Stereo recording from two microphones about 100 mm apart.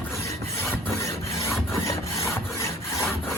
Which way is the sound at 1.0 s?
30° left (ahead or behind).